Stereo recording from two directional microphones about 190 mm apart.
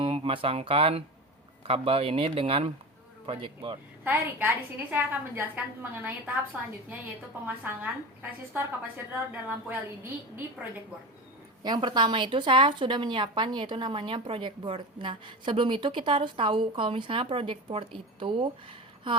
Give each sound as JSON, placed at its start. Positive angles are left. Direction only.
{"t": 0.0, "sound": "speech", "side_deg": -25}
{"t": 4.0, "sound": "a woman's voice", "side_deg": -10}
{"t": 11.6, "sound": "speech", "side_deg": -20}